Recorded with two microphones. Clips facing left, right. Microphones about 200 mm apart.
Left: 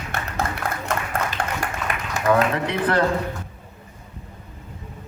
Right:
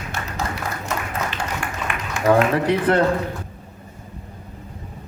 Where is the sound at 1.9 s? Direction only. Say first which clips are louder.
Even; 40° left (ahead or behind).